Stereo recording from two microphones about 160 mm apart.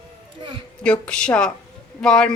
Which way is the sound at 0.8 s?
5° left (ahead or behind).